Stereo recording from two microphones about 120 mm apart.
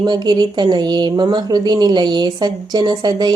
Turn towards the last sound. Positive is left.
turn(degrees=-35)  # may be behind; listen again after turning